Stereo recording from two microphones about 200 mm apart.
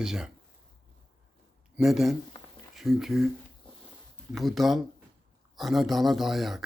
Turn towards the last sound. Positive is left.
turn(degrees=0)  # may be behind; listen again after turning